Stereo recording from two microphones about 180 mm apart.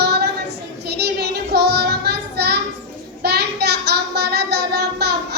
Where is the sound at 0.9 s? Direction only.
65° right (ahead or behind).